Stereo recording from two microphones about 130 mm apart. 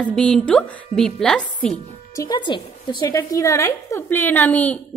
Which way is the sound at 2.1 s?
35° left (ahead or behind).